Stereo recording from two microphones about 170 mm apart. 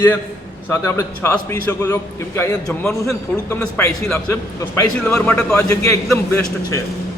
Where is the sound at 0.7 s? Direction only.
15° left (ahead or behind).